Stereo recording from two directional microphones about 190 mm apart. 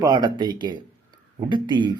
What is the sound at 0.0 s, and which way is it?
Speech, 20° right (ahead or behind).